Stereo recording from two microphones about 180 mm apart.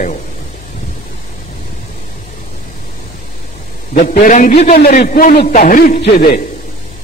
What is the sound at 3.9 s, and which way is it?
A man's voice, 45° left (ahead or behind).